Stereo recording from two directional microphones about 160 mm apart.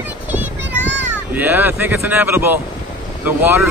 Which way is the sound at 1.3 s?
10° right (ahead or behind).